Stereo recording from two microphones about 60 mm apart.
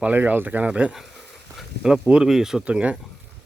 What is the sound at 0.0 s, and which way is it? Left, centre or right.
Speech, right.